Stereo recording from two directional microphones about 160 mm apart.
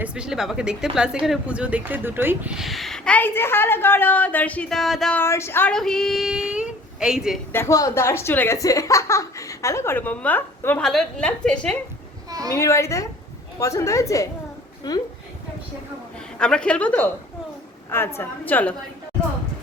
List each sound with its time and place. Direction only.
0.0 s speech: 5° right (ahead or behind)
5.2 s speech: 15° left (ahead or behind); by 7.3 s 5° right (ahead or behind)
7.5 s speech: 20° left (ahead or behind)
12.3 s a sound: 25° right (ahead or behind)
12.5 s a woman's voice: 15° left (ahead or behind)
16.4 s speech: 5° left (ahead or behind)